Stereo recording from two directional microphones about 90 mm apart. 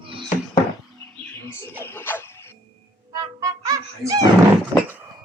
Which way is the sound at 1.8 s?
25° left (ahead or behind).